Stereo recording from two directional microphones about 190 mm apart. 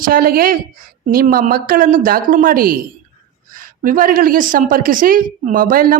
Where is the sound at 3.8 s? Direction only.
45° right (ahead or behind).